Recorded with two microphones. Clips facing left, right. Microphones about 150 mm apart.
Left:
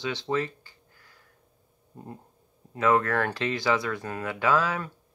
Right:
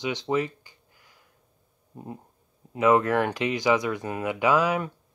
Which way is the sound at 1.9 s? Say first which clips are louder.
Right 3 dB; 20° right (ahead or behind).